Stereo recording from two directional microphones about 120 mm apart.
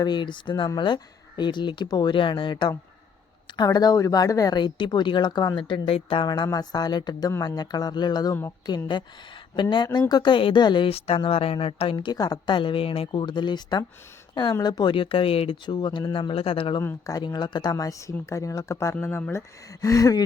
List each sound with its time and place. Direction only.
0.0 s speech: 40° left (ahead or behind)
9.6 s speech: 40° left (ahead or behind)
10.9 s speech: 55° left (ahead or behind)
11.9 s speech: 35° left (ahead or behind)
16.8 s speech: 30° left (ahead or behind)